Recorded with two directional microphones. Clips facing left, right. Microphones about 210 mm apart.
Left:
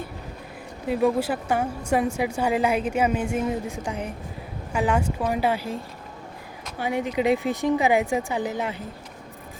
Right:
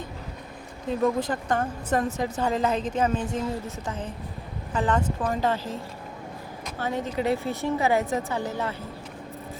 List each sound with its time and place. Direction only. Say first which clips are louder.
0.9 s a woman's voice: left 2 dB; 10° left (ahead or behind)